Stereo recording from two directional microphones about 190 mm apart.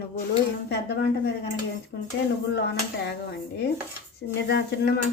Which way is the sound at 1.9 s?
65° left (ahead or behind).